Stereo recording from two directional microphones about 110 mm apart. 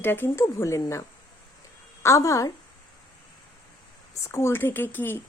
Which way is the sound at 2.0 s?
30° left (ahead or behind).